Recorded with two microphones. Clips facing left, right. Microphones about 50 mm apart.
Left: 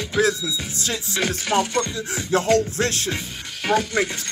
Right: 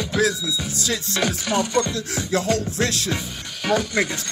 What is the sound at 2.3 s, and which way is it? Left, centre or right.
Rapping, left.